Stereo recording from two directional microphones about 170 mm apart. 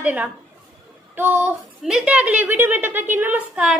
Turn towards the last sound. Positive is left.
turn(degrees=-5)  # may be behind; listen again after turning